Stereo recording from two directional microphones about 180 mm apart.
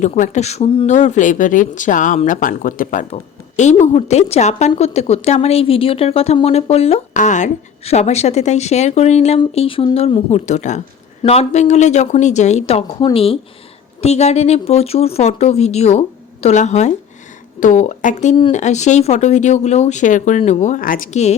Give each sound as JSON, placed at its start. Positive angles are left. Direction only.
{"t": 0.0, "sound": "a woman's voice", "side_deg": 40}